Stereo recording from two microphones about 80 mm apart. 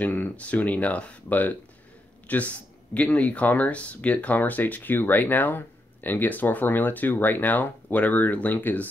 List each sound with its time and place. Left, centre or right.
0.0 s speech: left